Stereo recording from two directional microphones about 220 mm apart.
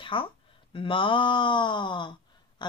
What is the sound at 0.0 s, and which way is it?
Speech, 25° left (ahead or behind).